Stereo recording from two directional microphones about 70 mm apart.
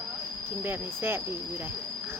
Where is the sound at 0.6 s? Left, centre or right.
Right.